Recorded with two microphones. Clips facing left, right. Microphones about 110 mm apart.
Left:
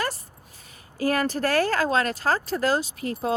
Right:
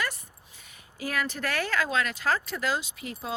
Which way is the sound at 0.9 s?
40° left (ahead or behind).